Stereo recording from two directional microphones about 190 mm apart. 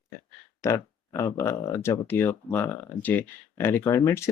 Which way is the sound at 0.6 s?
15° left (ahead or behind).